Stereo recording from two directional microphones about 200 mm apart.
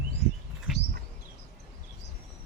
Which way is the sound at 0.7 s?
Centre (ahead or behind).